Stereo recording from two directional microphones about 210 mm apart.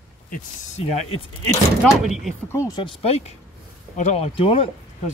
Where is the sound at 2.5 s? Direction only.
20° left (ahead or behind).